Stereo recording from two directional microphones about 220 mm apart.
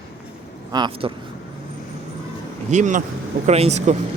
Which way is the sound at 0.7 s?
20° right (ahead or behind).